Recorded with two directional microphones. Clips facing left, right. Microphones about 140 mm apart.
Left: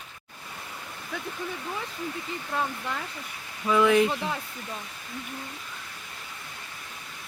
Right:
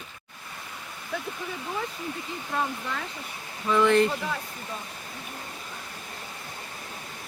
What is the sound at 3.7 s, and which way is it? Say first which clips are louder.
Speech: even; 5° left (ahead or behind).